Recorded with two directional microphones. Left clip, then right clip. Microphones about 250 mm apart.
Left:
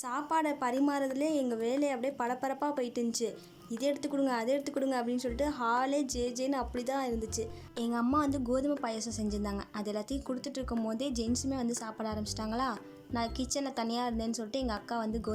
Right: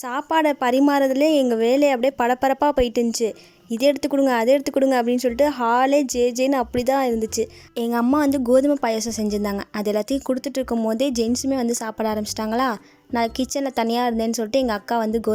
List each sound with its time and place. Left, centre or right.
0.3 s a woman's voice: right